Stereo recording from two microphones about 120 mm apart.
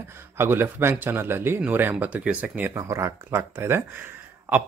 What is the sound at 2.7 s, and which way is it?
Speech, 25° right (ahead or behind).